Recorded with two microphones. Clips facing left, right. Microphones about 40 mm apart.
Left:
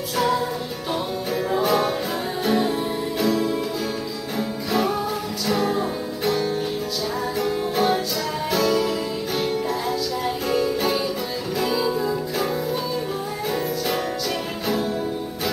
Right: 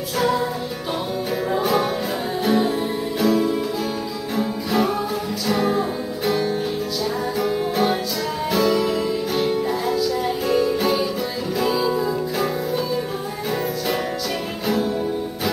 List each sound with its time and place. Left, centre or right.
1.5 s music: centre